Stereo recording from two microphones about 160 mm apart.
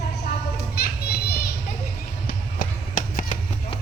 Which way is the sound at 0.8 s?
75° left (ahead or behind).